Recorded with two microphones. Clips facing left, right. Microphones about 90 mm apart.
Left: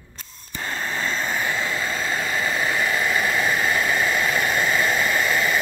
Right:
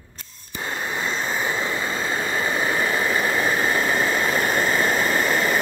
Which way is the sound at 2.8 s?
35° right (ahead or behind).